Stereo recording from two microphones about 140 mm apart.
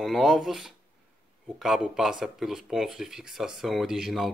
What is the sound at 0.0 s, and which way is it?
Speech, centre (ahead or behind).